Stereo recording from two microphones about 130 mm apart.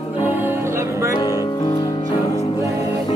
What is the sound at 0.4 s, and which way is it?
Music, 20° right (ahead or behind).